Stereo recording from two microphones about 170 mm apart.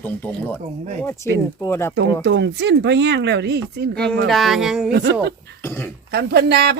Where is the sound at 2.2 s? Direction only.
90° right; by 3.9 s 75° right (ahead or behind).